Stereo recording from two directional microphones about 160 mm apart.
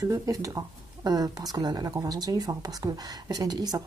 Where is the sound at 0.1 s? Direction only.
20° right (ahead or behind).